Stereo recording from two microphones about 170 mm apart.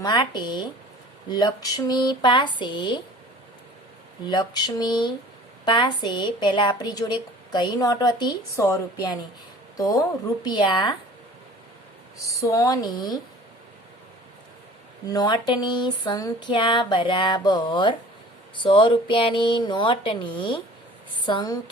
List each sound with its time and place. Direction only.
0.0 s a woman's voice: 25° left (ahead or behind)
4.3 s a woman's voice: 25° left (ahead or behind)
12.1 s a woman's voice: 20° left (ahead or behind)
15.0 s a woman's voice: 20° left (ahead or behind)